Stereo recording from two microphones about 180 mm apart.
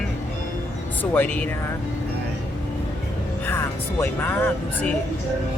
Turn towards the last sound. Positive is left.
turn(degrees=10)  # may be behind; listen again after turning